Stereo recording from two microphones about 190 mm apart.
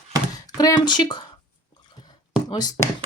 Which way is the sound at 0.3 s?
20° left (ahead or behind).